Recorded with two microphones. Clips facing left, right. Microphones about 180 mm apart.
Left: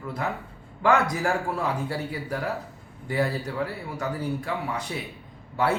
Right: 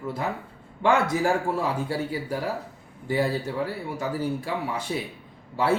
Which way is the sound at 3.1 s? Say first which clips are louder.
Right 2 dB; 25° right (ahead or behind).